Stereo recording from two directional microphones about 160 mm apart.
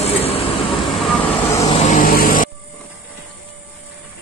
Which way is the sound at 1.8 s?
55° left (ahead or behind).